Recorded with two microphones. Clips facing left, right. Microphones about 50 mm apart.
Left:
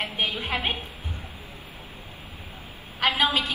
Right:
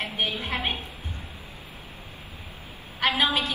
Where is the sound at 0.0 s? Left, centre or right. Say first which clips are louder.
Left 1 dB; left.